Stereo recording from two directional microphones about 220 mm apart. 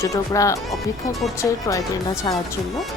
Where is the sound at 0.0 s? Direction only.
15° left (ahead or behind).